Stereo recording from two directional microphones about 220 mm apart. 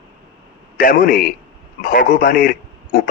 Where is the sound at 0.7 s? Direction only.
40° left (ahead or behind).